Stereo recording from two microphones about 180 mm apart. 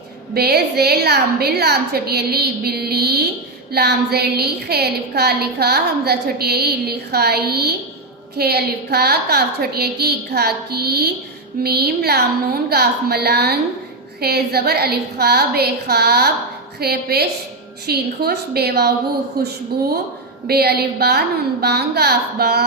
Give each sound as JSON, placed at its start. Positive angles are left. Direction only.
{"t": 0.3, "sound": "a woman's voice", "side_deg": -60}